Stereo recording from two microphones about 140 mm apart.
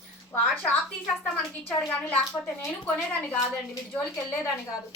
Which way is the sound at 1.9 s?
10° left (ahead or behind).